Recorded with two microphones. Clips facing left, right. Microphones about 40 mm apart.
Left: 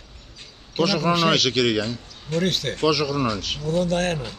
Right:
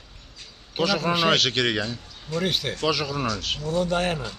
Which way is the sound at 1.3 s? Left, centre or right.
Right.